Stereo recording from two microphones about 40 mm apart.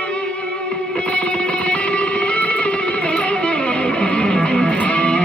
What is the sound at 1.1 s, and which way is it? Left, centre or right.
Music, left.